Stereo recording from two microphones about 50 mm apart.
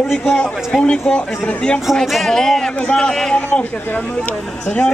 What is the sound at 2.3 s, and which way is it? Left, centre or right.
Speech, centre.